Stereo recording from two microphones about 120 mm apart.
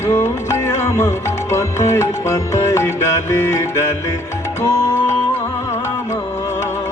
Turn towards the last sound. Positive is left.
turn(degrees=25)  # may be behind; listen again after turning